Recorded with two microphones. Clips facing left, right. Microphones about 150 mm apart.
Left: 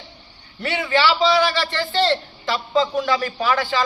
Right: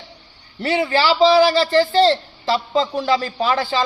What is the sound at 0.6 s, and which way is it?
A man's voice, 35° right (ahead or behind).